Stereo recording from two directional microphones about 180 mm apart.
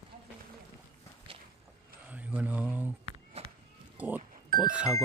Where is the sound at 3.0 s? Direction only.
35° right (ahead or behind).